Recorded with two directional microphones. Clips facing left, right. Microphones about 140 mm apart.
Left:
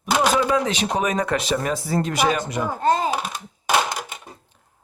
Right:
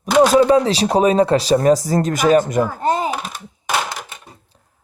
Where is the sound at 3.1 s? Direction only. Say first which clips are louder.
Even; 5° left (ahead or behind).